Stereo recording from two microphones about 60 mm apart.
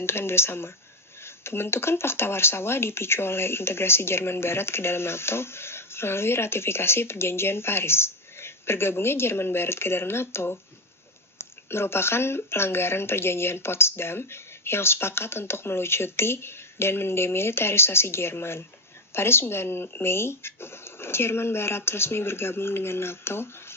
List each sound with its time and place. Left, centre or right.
0.0 s speech: left
11.7 s speech: left